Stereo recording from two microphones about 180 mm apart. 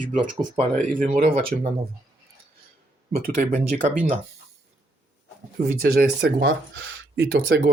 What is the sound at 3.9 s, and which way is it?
Speech, 50° right (ahead or behind).